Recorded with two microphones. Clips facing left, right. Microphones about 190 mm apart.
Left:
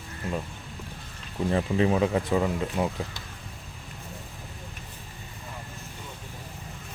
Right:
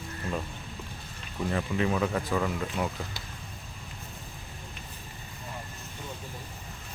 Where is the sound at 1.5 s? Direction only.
25° left (ahead or behind).